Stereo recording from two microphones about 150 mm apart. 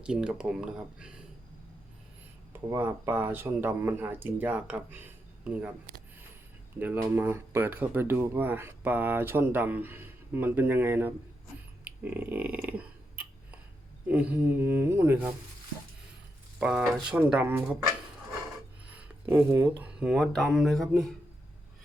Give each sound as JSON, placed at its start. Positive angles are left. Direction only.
{"t": 0.0, "sound": "speech", "side_deg": -5}
{"t": 2.5, "sound": "speech", "side_deg": -15}
{"t": 6.7, "sound": "speech", "side_deg": -15}
{"t": 12.0, "sound": "burping", "side_deg": -10}
{"t": 14.1, "sound": "speech", "side_deg": -10}
{"t": 16.6, "sound": "speech", "side_deg": -5}
{"t": 18.9, "sound": "speech", "side_deg": -10}